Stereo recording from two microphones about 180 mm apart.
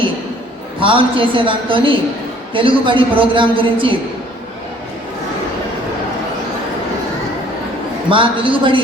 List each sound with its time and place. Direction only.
0.8 s a woman's voice: 30° right (ahead or behind)
8.1 s a woman's voice: 30° right (ahead or behind)